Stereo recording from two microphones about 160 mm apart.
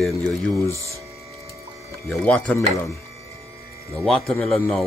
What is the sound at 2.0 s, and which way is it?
Speech, 5° left (ahead or behind).